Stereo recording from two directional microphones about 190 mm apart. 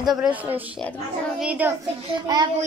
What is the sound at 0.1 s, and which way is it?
Speech, 5° right (ahead or behind).